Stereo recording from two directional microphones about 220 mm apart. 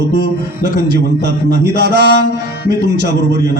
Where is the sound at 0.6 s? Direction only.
50° right (ahead or behind).